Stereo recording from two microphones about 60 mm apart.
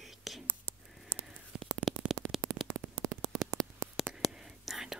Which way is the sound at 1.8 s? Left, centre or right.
Centre.